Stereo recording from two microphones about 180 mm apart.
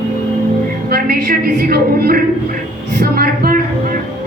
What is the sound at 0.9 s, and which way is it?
A woman's voice, 55° right (ahead or behind).